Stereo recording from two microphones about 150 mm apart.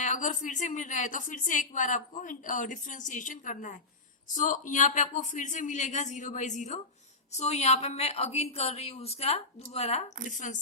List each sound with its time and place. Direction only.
0.0 s a woman's voice: 55° left (ahead or behind)
10.2 s a woman's voice: 60° left (ahead or behind)